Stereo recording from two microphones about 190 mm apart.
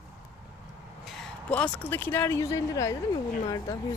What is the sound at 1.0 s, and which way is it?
Speech, 5° left (ahead or behind).